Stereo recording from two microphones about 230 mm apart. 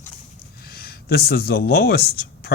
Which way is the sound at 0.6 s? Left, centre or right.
Left.